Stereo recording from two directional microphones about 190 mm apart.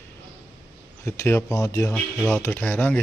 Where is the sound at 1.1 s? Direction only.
15° left (ahead or behind).